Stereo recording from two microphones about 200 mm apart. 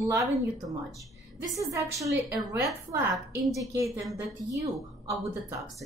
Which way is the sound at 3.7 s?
15° right (ahead or behind).